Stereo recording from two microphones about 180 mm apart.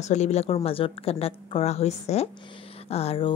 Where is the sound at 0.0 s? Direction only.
40° left (ahead or behind).